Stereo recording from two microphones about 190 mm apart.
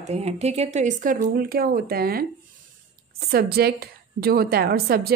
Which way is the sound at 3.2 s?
55° right (ahead or behind).